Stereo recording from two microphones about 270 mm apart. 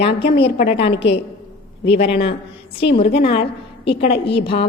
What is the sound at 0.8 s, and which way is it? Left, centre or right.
Speech, left.